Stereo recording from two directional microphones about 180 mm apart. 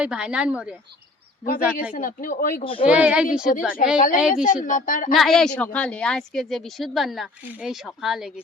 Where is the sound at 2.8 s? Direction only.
5° right (ahead or behind).